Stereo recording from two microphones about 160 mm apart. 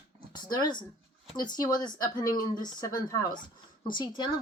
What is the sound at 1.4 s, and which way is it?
Speech, 25° left (ahead or behind).